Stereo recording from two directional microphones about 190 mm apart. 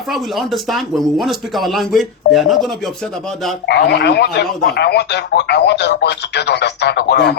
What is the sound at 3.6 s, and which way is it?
Speech, 60° left (ahead or behind).